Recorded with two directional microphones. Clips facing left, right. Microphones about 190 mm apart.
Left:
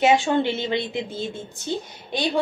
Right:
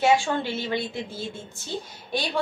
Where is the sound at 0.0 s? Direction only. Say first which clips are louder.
Left 3 dB; 20° left (ahead or behind).